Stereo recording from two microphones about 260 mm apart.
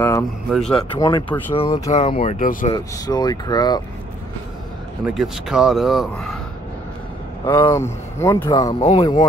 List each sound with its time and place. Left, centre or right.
0.0 s speech: centre
0.7 s speech: centre; by 2.7 s left
2.7 s speech: centre
5.0 s speech: centre
7.4 s speech: centre